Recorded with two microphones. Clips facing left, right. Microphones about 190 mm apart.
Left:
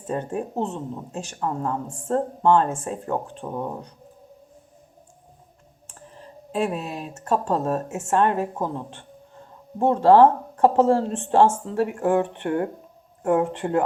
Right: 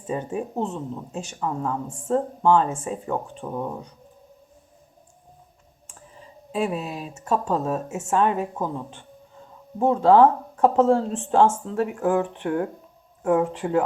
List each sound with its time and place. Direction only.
0.1 s speech: centre (ahead or behind)
3.4 s speech: 10° left (ahead or behind)
5.9 s speech: centre (ahead or behind)